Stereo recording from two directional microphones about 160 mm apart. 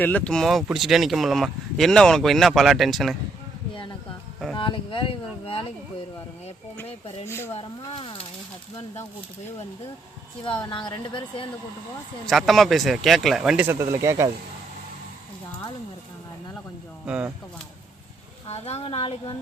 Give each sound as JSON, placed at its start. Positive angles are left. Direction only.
{"t": 0.0, "sound": "speech", "side_deg": 10}
{"t": 4.5, "sound": "speech", "side_deg": 30}
{"t": 7.3, "sound": "speech", "side_deg": 15}
{"t": 7.9, "sound": "speech", "side_deg": 35}
{"t": 10.7, "sound": "a woman's voice", "side_deg": 30}
{"t": 12.2, "sound": "speech", "side_deg": 0}
{"t": 17.1, "sound": "speech", "side_deg": -10}
{"t": 18.4, "sound": "speech", "side_deg": 40}